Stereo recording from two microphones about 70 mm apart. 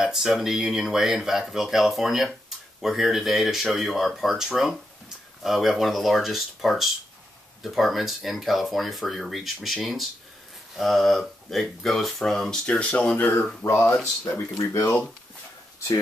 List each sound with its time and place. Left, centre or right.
0.0 s speech: centre; by 13.5 s left
13.7 s speech: left